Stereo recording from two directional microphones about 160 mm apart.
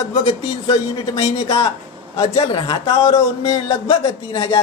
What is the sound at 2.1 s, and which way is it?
Speech, 40° left (ahead or behind).